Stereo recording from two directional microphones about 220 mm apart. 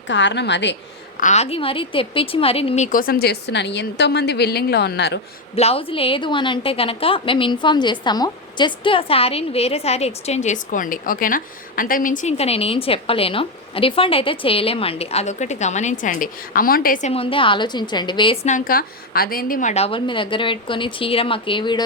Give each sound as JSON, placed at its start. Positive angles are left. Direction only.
{"t": 0.1, "sound": "a woman's voice", "side_deg": 55}
{"t": 1.2, "sound": "a woman's voice", "side_deg": 30}
{"t": 5.5, "sound": "a woman's voice", "side_deg": 25}
{"t": 18.5, "sound": "a woman's voice", "side_deg": 40}